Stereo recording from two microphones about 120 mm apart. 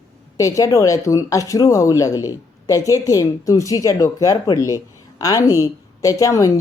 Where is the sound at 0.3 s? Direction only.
25° left (ahead or behind).